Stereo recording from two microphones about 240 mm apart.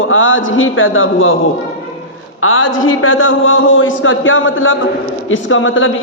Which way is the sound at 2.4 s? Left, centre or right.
Left.